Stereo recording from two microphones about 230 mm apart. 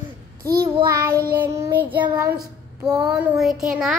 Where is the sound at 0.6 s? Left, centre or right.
Centre.